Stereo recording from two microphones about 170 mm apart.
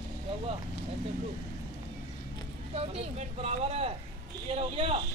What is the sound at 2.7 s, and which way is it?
Speech, 35° right (ahead or behind).